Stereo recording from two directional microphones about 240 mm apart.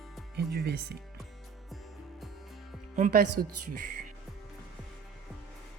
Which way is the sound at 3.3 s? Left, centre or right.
Right.